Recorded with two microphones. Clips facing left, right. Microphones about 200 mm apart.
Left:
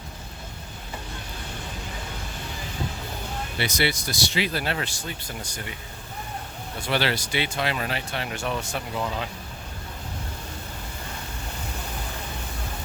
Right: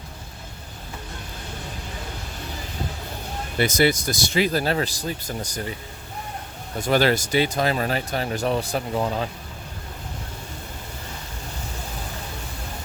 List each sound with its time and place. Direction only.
3.6 s speech: 45° right (ahead or behind)
6.7 s speech: 45° right (ahead or behind)